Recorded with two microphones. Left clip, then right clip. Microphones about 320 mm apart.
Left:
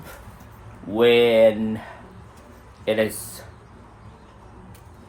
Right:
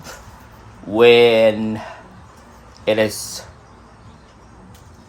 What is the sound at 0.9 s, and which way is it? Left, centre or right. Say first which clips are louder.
Speech: right 5 dB; right.